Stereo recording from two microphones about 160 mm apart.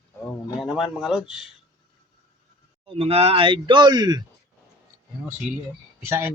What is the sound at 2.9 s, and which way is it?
Speech, 40° right (ahead or behind).